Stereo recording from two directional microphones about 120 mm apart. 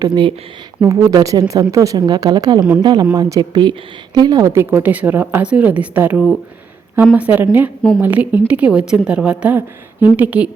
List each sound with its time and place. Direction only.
0.0 s speech: 35° right (ahead or behind); by 7.7 s 15° right (ahead or behind)
7.8 s speech: 5° left (ahead or behind)
8.0 s speech: 15° right (ahead or behind)